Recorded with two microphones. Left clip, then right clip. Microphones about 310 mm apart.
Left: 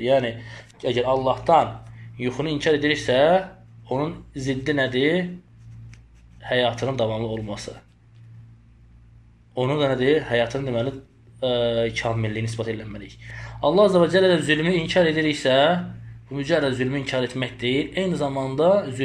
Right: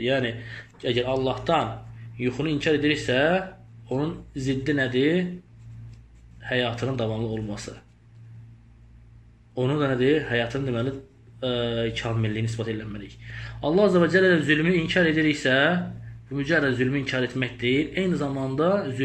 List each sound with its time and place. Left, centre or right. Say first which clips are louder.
0.0 s speech: left 5 dB; centre
6.4 s speech: left 4 dB; centre
7.1 s speech: left 3 dB; left
9.6 s speech: left 2 dB; centre